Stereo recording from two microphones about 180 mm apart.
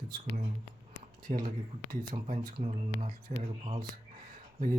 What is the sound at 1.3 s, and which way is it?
Speech, 45° right (ahead or behind).